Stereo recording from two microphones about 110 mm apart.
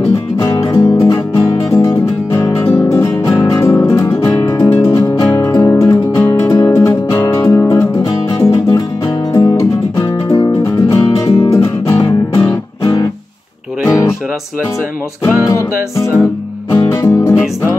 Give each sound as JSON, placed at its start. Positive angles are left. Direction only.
{"t": 0.4, "sound": "music", "side_deg": 30}
{"t": 4.6, "sound": "music", "side_deg": 20}
{"t": 4.8, "sound": "music", "side_deg": 30}
{"t": 15.4, "sound": "music", "side_deg": 25}